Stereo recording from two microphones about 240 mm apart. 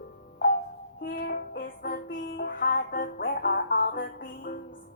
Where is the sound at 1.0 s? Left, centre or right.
Left.